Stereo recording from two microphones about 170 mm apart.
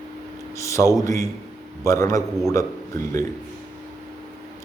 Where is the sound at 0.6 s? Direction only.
15° left (ahead or behind).